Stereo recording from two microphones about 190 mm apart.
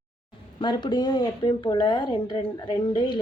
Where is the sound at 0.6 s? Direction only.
25° left (ahead or behind).